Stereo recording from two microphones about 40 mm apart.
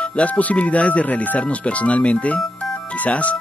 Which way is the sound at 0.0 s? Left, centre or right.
Left.